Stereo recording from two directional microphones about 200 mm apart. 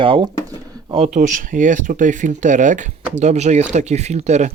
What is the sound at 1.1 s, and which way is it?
Speech, 40° right (ahead or behind).